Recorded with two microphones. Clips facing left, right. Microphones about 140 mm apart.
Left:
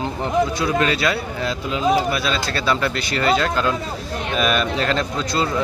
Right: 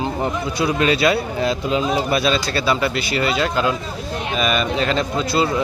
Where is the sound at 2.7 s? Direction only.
5° right (ahead or behind).